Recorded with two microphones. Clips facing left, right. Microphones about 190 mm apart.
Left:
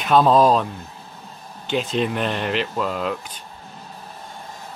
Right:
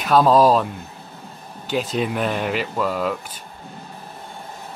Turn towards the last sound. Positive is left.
turn(degrees=-5)  # may be behind; listen again after turning